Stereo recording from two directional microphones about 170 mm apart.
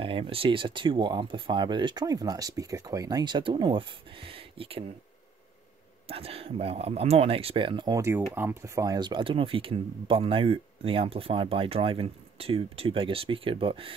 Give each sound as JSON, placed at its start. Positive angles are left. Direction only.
{"t": 0.0, "sound": "speech", "side_deg": -30}
{"t": 6.0, "sound": "speech", "side_deg": -35}